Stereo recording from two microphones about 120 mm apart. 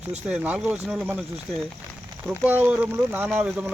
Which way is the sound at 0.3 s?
10° right (ahead or behind).